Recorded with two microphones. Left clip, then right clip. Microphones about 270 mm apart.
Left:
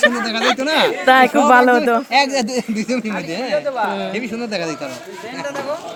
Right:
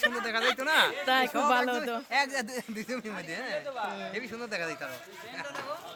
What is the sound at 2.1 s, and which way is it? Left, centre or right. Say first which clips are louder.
Speech: left 13 dB; right.